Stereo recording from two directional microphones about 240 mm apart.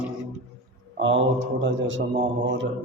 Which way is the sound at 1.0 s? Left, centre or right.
Right.